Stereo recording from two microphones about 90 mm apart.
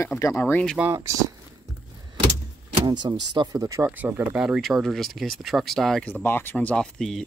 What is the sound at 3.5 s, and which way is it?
Speech, 35° right (ahead or behind).